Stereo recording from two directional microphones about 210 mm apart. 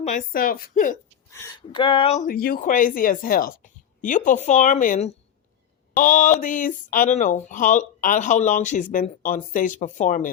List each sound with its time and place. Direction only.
0.0 s speech: 35° left (ahead or behind)
1.3 s speech: 10° left (ahead or behind)
1.8 s speech: 25° left (ahead or behind)